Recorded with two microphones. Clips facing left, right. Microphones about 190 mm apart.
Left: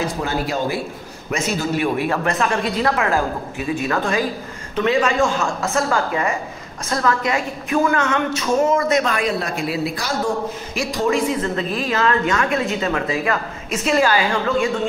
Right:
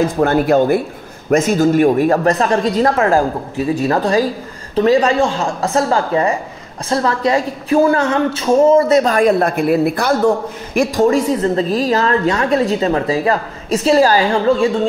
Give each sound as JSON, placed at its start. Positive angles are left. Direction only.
{"t": 0.1, "sound": "a woman's voice", "side_deg": -55}